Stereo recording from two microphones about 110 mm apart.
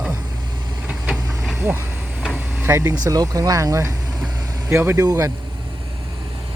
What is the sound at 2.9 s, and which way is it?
Speech, 35° right (ahead or behind).